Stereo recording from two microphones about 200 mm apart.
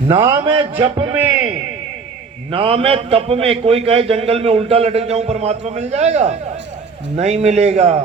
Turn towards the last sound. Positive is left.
turn(degrees=-35)  # may be behind; listen again after turning